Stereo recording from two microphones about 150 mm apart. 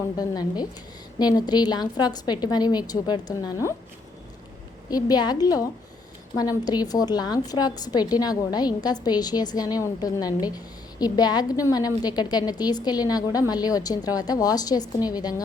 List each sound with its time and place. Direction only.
0.2 s a woman's voice: 25° left (ahead or behind)
4.9 s a woman's voice: 25° left (ahead or behind)